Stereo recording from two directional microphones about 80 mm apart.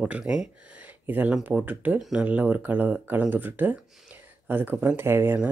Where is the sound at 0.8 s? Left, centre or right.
Right.